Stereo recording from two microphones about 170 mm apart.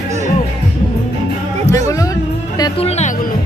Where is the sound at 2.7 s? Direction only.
40° left (ahead or behind).